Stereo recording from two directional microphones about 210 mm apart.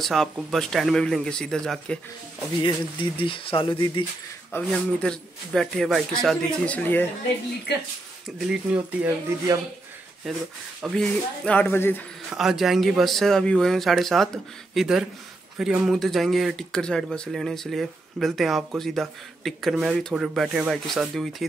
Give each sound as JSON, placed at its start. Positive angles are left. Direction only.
{"t": 0.0, "sound": "speech", "side_deg": 0}
{"t": 2.6, "sound": "speech", "side_deg": 25}
{"t": 4.5, "sound": "speech", "side_deg": 5}
{"t": 7.7, "sound": "speech", "side_deg": 50}
{"t": 8.5, "sound": "speech", "side_deg": -5}
{"t": 12.3, "sound": "speech", "side_deg": 0}